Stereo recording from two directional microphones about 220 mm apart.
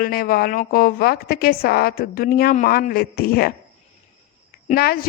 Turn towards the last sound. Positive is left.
turn(degrees=45)  # may be behind; listen again after turning